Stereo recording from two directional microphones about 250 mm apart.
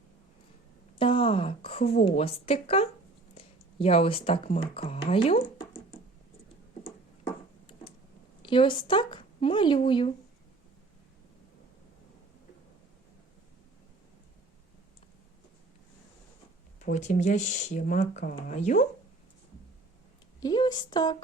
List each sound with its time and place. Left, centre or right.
0.9 s a woman's voice: left
8.4 s speech: centre
16.8 s speech: left
20.4 s speech: centre